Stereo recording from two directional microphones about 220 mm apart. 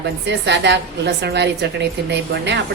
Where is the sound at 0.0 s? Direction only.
50° right (ahead or behind).